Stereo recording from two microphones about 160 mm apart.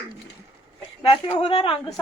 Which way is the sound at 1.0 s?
40° left (ahead or behind).